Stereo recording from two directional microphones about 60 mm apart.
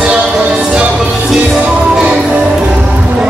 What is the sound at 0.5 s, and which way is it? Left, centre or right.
Music, centre.